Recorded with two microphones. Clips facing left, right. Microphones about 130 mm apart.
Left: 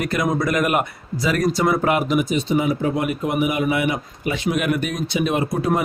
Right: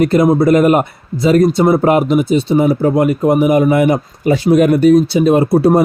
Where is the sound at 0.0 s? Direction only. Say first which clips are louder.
Right 11 dB; 30° right (ahead or behind).